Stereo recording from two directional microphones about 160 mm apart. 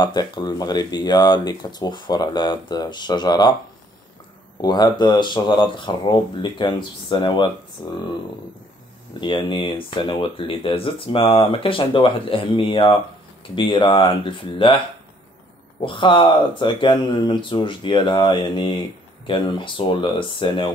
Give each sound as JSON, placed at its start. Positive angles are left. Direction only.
{"t": 0.0, "sound": "speech", "side_deg": 25}
{"t": 4.6, "sound": "speech", "side_deg": 25}
{"t": 9.2, "sound": "speech", "side_deg": 30}
{"t": 15.8, "sound": "speech", "side_deg": 30}